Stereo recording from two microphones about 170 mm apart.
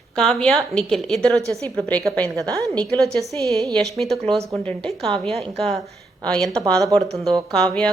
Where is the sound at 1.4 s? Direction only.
20° right (ahead or behind).